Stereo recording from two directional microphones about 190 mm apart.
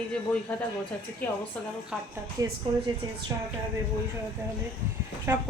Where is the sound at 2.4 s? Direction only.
20° right (ahead or behind).